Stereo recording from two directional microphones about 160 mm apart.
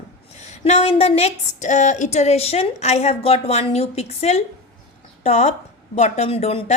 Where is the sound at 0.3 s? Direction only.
45° left (ahead or behind).